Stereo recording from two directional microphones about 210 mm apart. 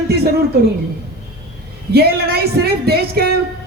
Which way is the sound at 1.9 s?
50° right (ahead or behind).